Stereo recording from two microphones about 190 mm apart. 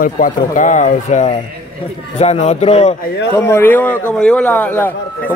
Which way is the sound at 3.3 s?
15° left (ahead or behind).